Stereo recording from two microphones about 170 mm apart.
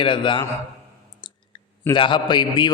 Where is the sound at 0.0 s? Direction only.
30° left (ahead or behind).